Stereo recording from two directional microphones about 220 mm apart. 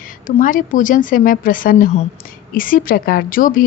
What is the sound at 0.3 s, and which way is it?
A woman's voice, 35° left (ahead or behind).